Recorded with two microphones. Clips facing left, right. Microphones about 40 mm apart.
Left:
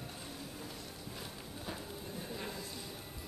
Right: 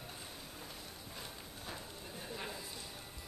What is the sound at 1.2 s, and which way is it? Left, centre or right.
Clip-clop, centre.